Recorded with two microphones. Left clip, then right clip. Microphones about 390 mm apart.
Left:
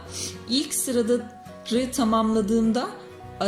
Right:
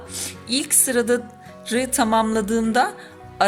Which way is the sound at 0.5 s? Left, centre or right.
Right.